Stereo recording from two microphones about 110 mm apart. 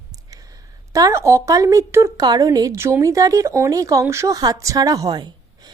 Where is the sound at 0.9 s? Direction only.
30° right (ahead or behind).